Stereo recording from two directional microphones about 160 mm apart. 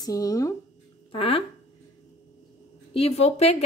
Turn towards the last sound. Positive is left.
turn(degrees=40)  # may be behind; listen again after turning